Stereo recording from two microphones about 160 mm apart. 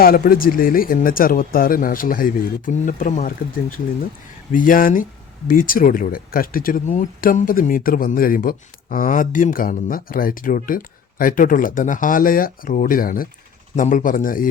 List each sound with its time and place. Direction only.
0.0 s speech: 65° left (ahead or behind)